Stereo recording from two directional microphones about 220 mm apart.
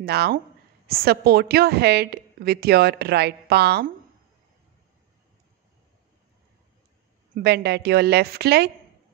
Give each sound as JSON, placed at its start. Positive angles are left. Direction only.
{"t": 0.0, "sound": "a woman's voice", "side_deg": -45}
{"t": 7.3, "sound": "a woman's voice", "side_deg": -45}